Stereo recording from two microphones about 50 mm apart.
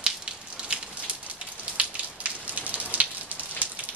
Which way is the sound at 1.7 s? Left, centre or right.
Right.